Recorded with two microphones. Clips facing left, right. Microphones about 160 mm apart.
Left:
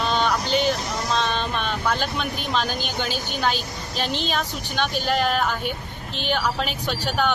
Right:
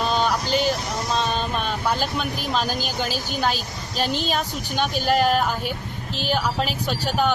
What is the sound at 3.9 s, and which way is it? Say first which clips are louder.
Speech: right 2 dB; 45° right (ahead or behind).